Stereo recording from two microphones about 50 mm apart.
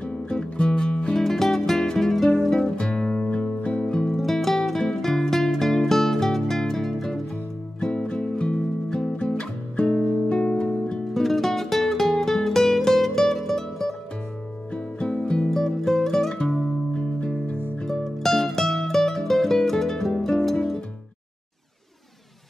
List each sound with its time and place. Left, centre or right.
0.0 s music: centre
2.6 s music: centre
4.1 s music: centre
7.8 s music: centre
11.1 s music: centre
14.7 s music: centre
15.5 s music: centre
17.8 s music: centre